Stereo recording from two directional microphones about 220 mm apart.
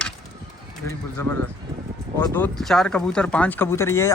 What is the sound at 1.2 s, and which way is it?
Speech, 10° left (ahead or behind).